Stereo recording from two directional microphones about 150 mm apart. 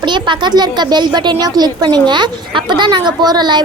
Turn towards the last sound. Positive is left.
turn(degrees=-30)  # may be behind; listen again after turning